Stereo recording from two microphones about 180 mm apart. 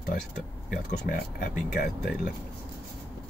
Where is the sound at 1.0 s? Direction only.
55° left (ahead or behind).